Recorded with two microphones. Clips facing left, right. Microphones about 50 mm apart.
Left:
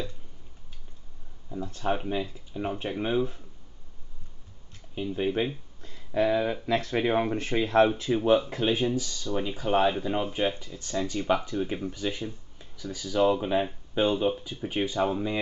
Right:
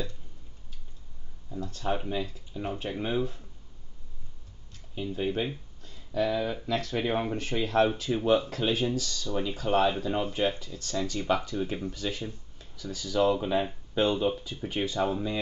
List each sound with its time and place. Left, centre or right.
1.5 s a sound: left
2.0 s speech: centre
4.9 s speech: centre
5.8 s a sound: left
6.6 s speech: left
7.0 s speech: centre
7.6 s speech: left
8.1 s speech: centre